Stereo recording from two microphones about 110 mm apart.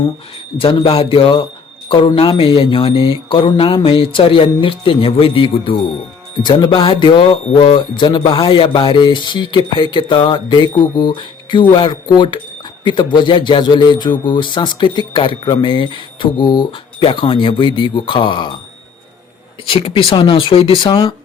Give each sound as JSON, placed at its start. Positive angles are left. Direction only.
{"t": 0.6, "sound": "speech", "side_deg": 50}
{"t": 19.6, "sound": "speech", "side_deg": 55}